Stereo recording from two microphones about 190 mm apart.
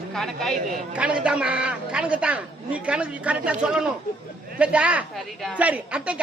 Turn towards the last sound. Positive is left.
turn(degrees=-5)  # may be behind; listen again after turning